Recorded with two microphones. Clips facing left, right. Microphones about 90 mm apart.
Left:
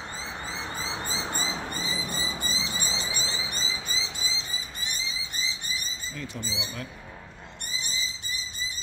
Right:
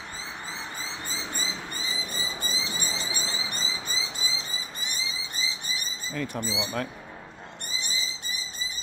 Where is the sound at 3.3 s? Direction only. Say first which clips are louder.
Even; centre (ahead or behind).